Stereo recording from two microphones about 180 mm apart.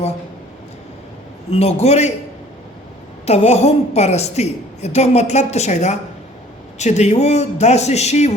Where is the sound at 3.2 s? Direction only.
35° left (ahead or behind).